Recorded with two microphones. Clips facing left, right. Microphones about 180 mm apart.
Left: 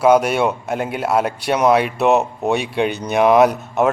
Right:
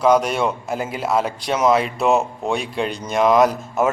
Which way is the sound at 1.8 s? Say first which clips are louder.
Left 2 dB; centre (ahead or behind).